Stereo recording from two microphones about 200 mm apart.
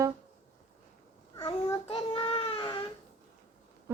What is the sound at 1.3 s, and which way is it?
Child singing, 20° left (ahead or behind).